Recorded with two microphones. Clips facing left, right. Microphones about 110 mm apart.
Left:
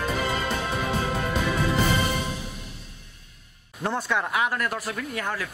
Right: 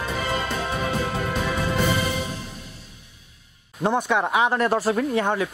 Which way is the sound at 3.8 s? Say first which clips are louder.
Right 5 dB; 20° right (ahead or behind).